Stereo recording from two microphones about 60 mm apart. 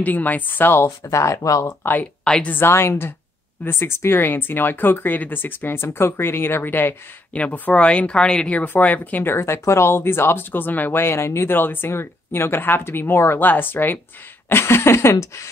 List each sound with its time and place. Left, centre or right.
0.0 s speech: left
0.8 s speech: left
1.7 s speech: left
2.2 s a woman's voice: centre
2.5 s speech: left
7.3 s speech: left
11.5 s speech: left
14.5 s a sound: left